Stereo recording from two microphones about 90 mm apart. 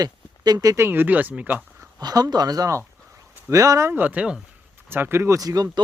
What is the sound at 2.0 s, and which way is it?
Speech, 45° right (ahead or behind).